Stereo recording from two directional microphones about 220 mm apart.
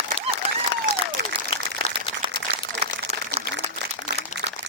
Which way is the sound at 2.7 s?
55° right (ahead or behind).